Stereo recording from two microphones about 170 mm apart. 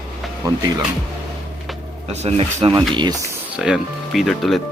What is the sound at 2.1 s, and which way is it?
Speech, 40° right (ahead or behind).